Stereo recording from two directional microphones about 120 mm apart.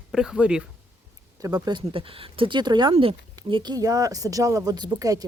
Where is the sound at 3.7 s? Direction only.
30° right (ahead or behind).